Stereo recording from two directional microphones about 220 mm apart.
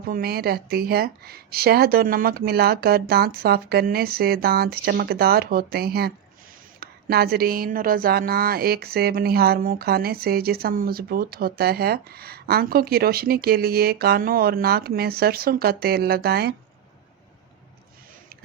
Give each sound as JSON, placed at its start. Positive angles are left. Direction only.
{"t": 0.0, "sound": "speech", "side_deg": -40}